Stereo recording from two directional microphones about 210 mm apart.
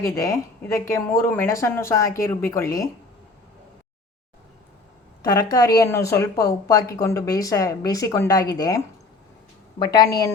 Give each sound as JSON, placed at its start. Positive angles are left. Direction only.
{"t": 0.0, "sound": "speech", "side_deg": 15}
{"t": 5.2, "sound": "a woman's voice", "side_deg": 15}